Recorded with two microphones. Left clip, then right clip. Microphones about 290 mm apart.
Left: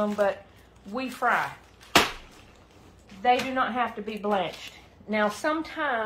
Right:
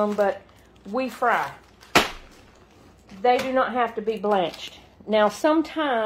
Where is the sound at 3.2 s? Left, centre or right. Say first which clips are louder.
Right 3 dB; right.